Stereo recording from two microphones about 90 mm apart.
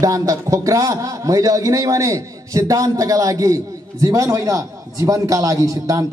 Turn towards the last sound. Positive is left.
turn(degrees=-40)  # may be behind; listen again after turning